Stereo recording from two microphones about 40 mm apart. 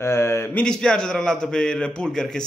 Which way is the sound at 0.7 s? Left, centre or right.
Centre.